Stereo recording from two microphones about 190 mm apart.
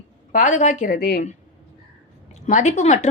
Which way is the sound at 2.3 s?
40° left (ahead or behind).